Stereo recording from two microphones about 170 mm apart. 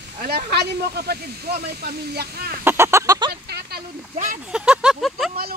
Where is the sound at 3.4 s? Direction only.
75° right (ahead or behind).